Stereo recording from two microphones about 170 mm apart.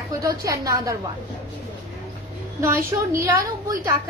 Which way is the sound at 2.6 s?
15° right (ahead or behind).